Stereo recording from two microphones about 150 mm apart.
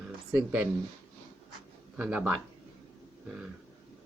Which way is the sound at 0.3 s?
10° right (ahead or behind).